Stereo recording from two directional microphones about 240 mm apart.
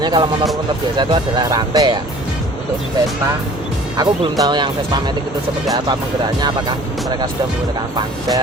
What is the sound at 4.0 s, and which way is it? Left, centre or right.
Speech, centre.